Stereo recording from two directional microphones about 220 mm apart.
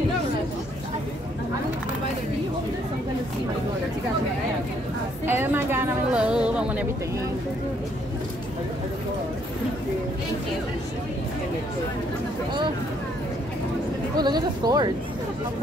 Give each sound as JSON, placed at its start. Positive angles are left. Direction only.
{"t": 5.2, "sound": "a woman's voice", "side_deg": -10}
{"t": 14.1, "sound": "speech", "side_deg": -20}